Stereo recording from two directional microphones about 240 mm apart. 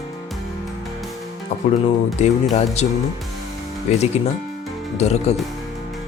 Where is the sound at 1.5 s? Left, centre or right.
Left.